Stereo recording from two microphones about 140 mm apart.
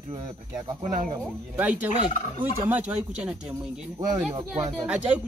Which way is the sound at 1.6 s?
10° right (ahead or behind).